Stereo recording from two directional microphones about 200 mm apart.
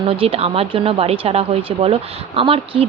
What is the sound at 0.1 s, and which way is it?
Speech, 30° right (ahead or behind).